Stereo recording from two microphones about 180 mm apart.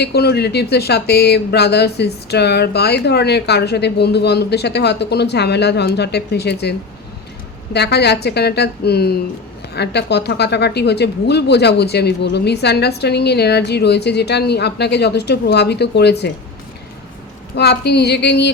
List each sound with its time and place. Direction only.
0.0 s speech: 65° left (ahead or behind)
17.5 s speech: 65° left (ahead or behind)